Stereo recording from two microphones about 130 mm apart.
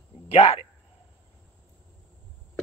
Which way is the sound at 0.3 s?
45° left (ahead or behind).